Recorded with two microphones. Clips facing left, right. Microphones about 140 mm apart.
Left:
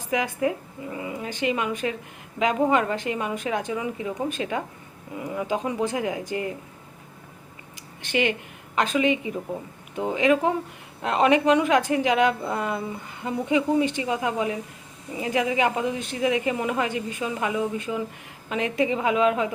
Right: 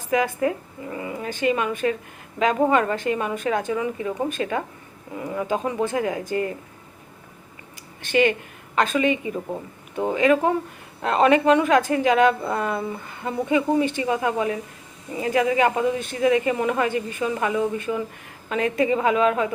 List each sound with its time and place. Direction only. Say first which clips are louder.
0.1 s a woman's voice: right 3 dB; 15° left (ahead or behind)
8.0 s a woman's voice: right 5 dB; 15° left (ahead or behind)